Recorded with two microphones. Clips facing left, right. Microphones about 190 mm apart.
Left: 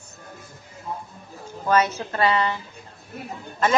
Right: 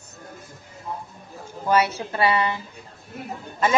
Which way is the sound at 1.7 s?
10° right (ahead or behind).